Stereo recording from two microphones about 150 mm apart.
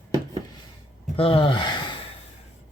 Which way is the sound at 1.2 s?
35° left (ahead or behind).